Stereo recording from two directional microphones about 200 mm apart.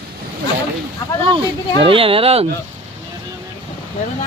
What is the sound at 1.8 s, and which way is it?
Speech, 25° right (ahead or behind).